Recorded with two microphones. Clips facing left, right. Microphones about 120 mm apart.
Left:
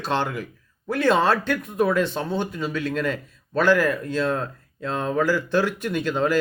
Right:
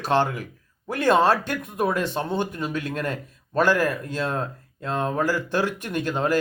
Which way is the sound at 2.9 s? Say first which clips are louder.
Left 3 dB; 45° right (ahead or behind).